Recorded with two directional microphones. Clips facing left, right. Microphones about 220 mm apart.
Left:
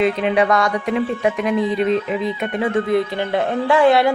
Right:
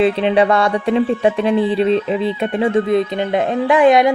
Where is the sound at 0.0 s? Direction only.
30° right (ahead or behind).